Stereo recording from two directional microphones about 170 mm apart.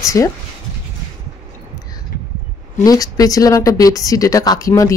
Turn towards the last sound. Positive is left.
turn(degrees=20)  # may be behind; listen again after turning